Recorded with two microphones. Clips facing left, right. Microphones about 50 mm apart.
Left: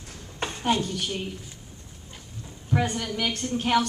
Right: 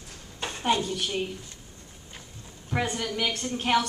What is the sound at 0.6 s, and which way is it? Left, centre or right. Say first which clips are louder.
Speech: even; centre.